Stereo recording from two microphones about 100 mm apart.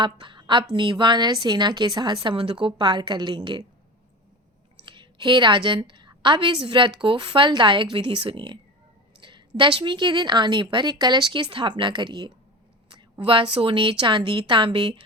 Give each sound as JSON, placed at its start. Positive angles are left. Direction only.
{"t": 0.0, "sound": "a woman's voice", "side_deg": -50}
{"t": 2.2, "sound": "a woman's voice", "side_deg": -65}
{"t": 4.9, "sound": "a woman's voice", "side_deg": -55}